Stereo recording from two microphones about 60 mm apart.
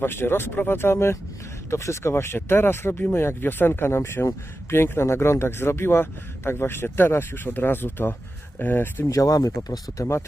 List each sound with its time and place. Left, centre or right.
0.0 s speech: left
9.0 s speech: left